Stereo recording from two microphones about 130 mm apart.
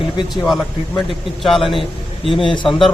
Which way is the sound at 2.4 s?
40° left (ahead or behind).